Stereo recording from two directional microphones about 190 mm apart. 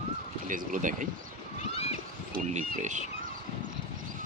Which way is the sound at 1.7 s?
30° left (ahead or behind).